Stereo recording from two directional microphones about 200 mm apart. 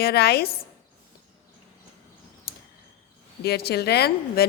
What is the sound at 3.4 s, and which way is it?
A woman's voice, 55° left (ahead or behind).